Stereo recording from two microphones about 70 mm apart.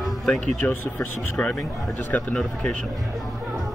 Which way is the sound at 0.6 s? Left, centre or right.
Left.